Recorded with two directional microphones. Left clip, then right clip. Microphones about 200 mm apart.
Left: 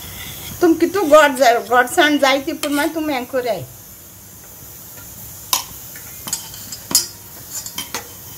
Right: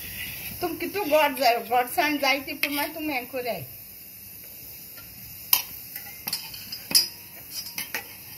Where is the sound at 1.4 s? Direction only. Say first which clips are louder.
Left 9 dB; 25° left (ahead or behind).